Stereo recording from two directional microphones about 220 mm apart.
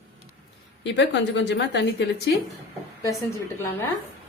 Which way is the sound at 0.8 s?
55° left (ahead or behind).